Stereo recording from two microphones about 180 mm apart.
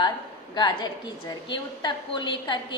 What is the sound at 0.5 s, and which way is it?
A woman's voice, 25° left (ahead or behind).